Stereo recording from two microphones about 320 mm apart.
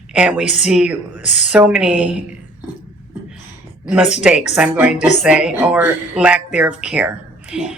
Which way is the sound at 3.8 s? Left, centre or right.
Centre.